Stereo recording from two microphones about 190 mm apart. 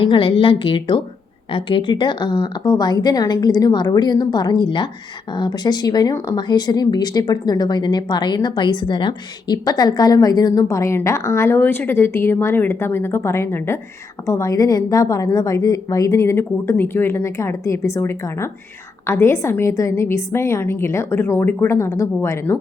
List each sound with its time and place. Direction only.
0.0 s a woman's voice: 25° left (ahead or behind)